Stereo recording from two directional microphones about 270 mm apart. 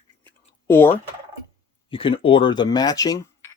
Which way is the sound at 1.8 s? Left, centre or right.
Centre.